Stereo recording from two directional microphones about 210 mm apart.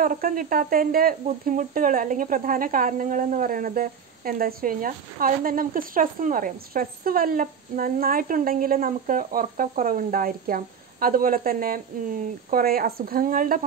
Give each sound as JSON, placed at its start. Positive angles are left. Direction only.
{"t": 0.0, "sound": "speech", "side_deg": -40}